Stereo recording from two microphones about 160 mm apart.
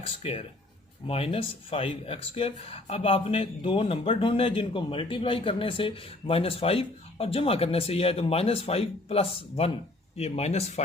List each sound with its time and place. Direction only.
0.0 s speech: 35° left (ahead or behind)